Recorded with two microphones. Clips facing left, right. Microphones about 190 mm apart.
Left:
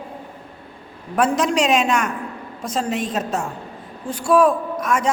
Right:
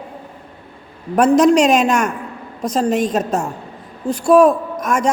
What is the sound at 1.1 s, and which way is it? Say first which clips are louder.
A man's voice: right 7 dB; 40° right (ahead or behind).